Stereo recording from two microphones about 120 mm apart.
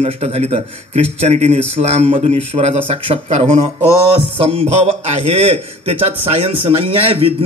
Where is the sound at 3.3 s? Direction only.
65° right (ahead or behind).